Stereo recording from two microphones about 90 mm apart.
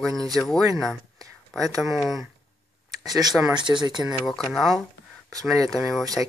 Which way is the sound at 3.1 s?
45° right (ahead or behind).